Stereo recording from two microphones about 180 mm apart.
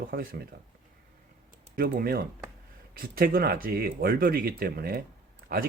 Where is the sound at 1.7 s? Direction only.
55° right (ahead or behind).